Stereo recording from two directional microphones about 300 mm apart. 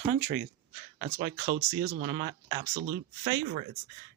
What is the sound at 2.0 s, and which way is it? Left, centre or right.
Speech, right.